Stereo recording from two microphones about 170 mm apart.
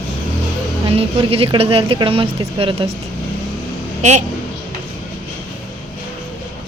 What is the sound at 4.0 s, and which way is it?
Speech, 45° right (ahead or behind).